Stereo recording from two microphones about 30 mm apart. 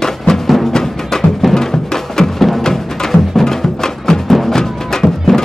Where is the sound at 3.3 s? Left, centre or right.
Centre.